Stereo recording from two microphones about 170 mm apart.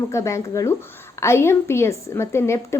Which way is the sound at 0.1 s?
15° left (ahead or behind).